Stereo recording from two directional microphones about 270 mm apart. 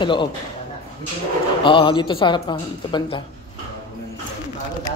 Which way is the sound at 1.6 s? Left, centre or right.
Centre.